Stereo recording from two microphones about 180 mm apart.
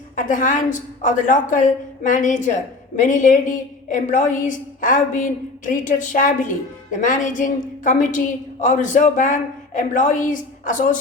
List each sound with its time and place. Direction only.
0.2 s a woman's voice: 45° left (ahead or behind)